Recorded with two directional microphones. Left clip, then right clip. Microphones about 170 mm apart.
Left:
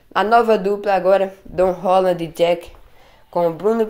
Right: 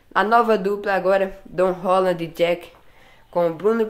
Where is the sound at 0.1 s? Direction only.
5° left (ahead or behind).